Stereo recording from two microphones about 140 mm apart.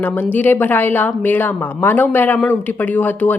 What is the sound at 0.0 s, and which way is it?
Speech, 15° left (ahead or behind).